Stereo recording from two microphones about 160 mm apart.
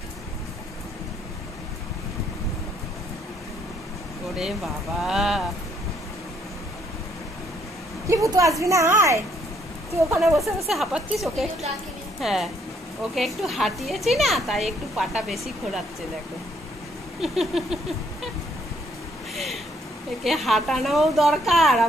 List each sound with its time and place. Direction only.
4.4 s speech: centre (ahead or behind)
8.1 s a woman's voice: 20° right (ahead or behind)
10.2 s speech: centre (ahead or behind)
17.2 s speech: centre (ahead or behind)
19.3 s a sound: centre (ahead or behind)
20.2 s speech: centre (ahead or behind)